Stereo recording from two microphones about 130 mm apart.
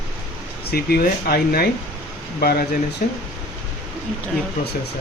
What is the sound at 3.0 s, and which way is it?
Speech, 90° left.